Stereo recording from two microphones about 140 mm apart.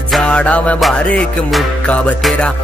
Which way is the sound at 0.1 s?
5° left (ahead or behind).